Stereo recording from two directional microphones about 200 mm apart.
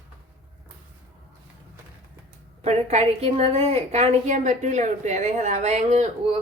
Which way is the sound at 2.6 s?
35° right (ahead or behind).